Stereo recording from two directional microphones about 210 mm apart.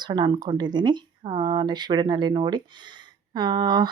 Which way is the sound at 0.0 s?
20° right (ahead or behind).